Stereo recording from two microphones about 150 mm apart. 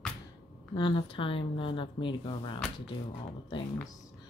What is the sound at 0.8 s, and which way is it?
Speech, 30° left (ahead or behind).